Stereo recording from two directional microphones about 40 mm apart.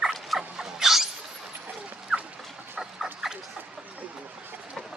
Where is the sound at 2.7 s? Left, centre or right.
Centre.